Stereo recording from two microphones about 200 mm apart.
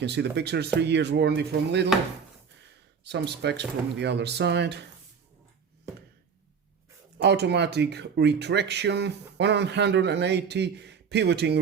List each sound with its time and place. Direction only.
0.0 s speech: 60° right (ahead or behind)
3.0 s speech: 55° right (ahead or behind)
7.2 s speech: 55° right (ahead or behind)